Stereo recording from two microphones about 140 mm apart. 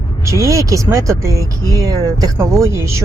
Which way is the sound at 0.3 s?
20° right (ahead or behind).